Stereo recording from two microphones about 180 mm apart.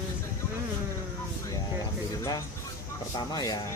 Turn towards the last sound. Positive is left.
turn(degrees=20)  # may be behind; listen again after turning